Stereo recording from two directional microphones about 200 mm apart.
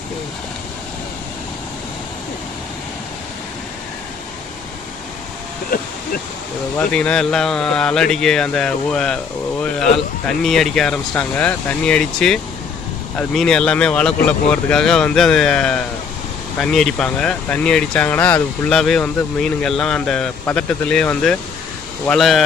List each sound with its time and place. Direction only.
5.7 s speech: 45° left (ahead or behind)
6.7 s speech: 5° left (ahead or behind)